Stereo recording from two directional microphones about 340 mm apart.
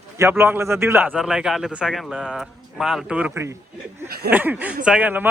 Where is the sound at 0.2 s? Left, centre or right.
Centre.